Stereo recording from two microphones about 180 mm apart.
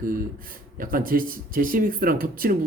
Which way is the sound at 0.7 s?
50° right (ahead or behind).